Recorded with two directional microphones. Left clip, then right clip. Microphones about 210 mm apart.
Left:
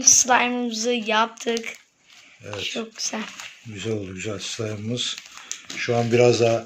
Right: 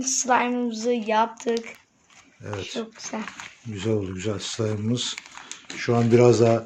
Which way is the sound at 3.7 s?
50° right (ahead or behind).